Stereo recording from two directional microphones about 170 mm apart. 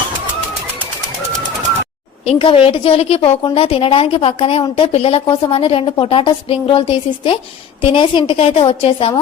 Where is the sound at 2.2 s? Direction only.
35° left (ahead or behind).